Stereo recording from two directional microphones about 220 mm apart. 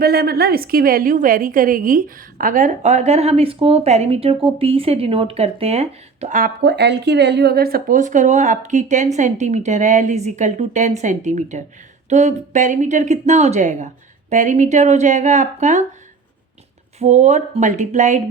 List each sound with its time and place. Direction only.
0.0 s a woman's voice: 45° right (ahead or behind)
17.0 s a woman's voice: 30° right (ahead or behind)